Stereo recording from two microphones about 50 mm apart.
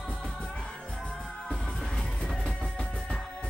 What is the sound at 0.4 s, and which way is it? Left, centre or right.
Music, left.